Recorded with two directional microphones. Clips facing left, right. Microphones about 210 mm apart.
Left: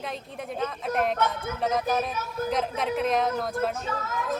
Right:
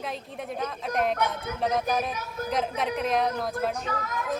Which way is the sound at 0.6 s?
Centre (ahead or behind).